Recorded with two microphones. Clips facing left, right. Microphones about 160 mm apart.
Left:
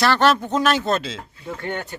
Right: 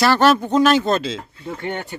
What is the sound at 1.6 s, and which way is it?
Speech, 15° right (ahead or behind).